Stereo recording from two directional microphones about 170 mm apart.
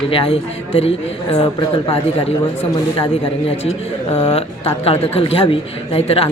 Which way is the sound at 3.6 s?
35° left (ahead or behind).